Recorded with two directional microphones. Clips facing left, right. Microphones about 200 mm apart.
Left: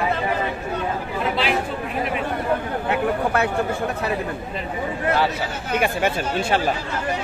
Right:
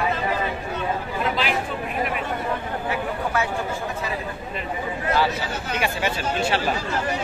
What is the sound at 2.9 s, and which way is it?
Speech, 60° left (ahead or behind).